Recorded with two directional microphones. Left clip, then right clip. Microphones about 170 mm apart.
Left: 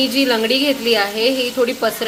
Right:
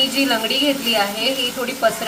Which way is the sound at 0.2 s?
40° left (ahead or behind).